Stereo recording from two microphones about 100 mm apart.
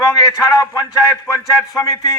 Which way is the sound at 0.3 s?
35° left (ahead or behind).